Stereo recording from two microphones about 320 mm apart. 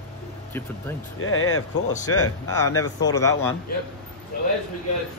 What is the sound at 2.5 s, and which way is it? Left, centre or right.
Speech, centre.